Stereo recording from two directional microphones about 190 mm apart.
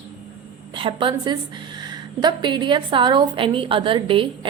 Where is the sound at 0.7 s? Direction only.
25° right (ahead or behind).